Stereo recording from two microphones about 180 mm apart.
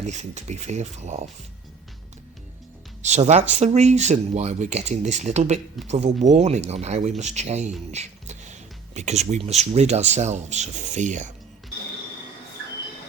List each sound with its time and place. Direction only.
0.0 s speech: 40° right (ahead or behind)
3.0 s speech: 40° right (ahead or behind)
7.9 s a sound: 40° right (ahead or behind)
9.0 s speech: 40° right (ahead or behind)